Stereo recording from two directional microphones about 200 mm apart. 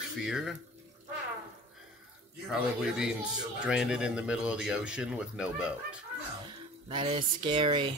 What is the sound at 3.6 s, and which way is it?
Speech, 5° right (ahead or behind).